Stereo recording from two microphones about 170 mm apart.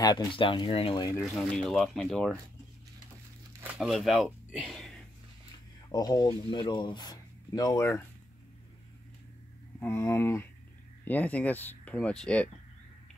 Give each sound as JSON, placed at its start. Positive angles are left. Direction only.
{"t": 0.0, "sound": "speech", "side_deg": 25}
{"t": 1.3, "sound": "speech", "side_deg": 0}
{"t": 3.7, "sound": "speech", "side_deg": 0}
{"t": 5.9, "sound": "speech", "side_deg": 25}
{"t": 9.8, "sound": "speech", "side_deg": 15}